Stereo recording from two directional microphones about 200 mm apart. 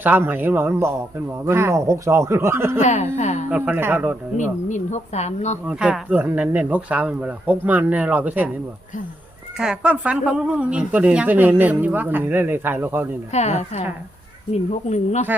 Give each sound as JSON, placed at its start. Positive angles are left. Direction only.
{"t": 0.0, "sound": "a woman's voice", "side_deg": -10}
{"t": 2.8, "sound": "a woman's voice", "side_deg": 35}
{"t": 3.5, "sound": "a woman's voice", "side_deg": -10}
{"t": 4.7, "sound": "a woman's voice", "side_deg": 35}
{"t": 5.6, "sound": "a woman's voice", "side_deg": -5}
{"t": 9.6, "sound": "a woman's voice", "side_deg": -5}
{"t": 13.3, "sound": "a woman's voice", "side_deg": 35}